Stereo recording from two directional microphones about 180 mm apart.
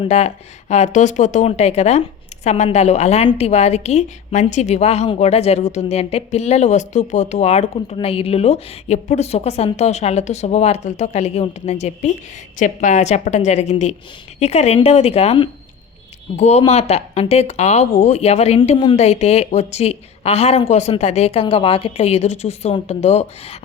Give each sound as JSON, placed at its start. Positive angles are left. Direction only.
{"t": 0.0, "sound": "speech", "side_deg": 35}